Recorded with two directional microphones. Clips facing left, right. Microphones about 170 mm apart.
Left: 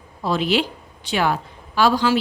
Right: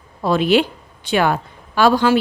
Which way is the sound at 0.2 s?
55° right (ahead or behind).